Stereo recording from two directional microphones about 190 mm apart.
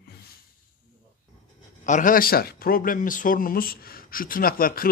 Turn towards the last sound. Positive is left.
turn(degrees=50)  # may be behind; listen again after turning